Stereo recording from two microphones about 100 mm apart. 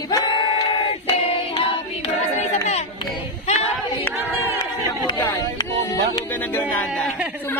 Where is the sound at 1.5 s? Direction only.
60° left (ahead or behind).